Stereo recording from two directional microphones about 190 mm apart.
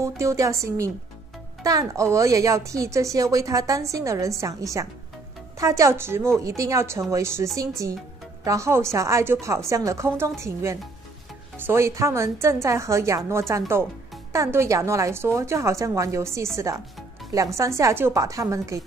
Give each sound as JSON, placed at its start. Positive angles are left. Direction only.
{"t": 0.0, "sound": "speech", "side_deg": -15}